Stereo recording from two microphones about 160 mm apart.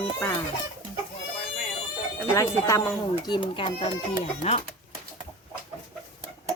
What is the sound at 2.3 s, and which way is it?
Speech, 20° left (ahead or behind).